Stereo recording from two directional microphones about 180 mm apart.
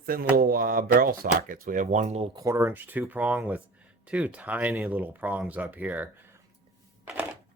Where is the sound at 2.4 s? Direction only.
15° right (ahead or behind).